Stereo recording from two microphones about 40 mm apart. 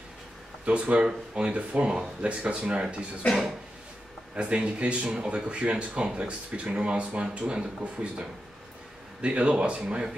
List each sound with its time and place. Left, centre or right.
0.7 s speech: right
4.4 s speech: right